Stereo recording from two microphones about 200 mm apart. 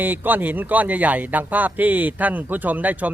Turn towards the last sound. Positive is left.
turn(degrees=-10)  # may be behind; listen again after turning